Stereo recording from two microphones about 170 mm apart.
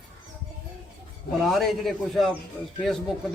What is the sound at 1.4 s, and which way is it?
A man's voice, centre (ahead or behind).